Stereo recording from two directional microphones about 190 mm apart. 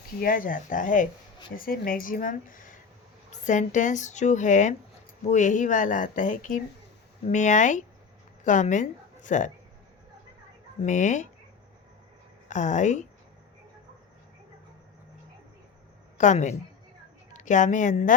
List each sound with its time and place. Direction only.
0.2 s speech: 45° left (ahead or behind)
10.8 s speech: 40° left (ahead or behind)
12.5 s speech: 40° left (ahead or behind)
16.1 s a woman's voice: 40° left (ahead or behind)